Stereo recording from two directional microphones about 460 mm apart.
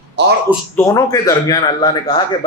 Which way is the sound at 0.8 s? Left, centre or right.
Centre.